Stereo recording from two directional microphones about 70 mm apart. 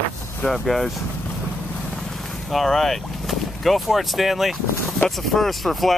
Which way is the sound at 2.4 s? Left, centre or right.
Centre.